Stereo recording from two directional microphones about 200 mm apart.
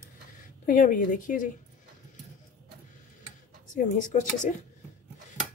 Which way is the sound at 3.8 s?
40° left (ahead or behind).